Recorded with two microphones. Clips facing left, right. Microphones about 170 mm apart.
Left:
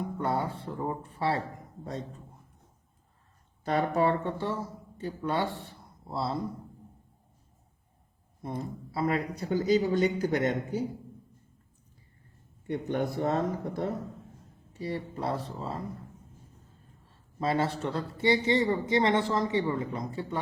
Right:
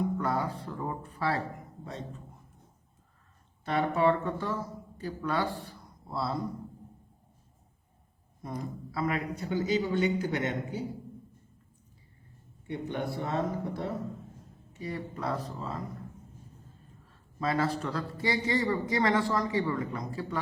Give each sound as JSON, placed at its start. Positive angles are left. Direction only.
{"t": 0.2, "sound": "a man's voice", "side_deg": 25}
{"t": 3.6, "sound": "a man's voice", "side_deg": 40}
{"t": 8.4, "sound": "a man's voice", "side_deg": 25}
{"t": 12.6, "sound": "speech", "side_deg": 45}
{"t": 14.7, "sound": "a man's voice", "side_deg": 30}
{"t": 17.4, "sound": "a man's voice", "side_deg": 25}